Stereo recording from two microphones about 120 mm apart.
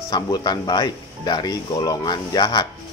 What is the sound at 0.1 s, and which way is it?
Speech, 35° left (ahead or behind).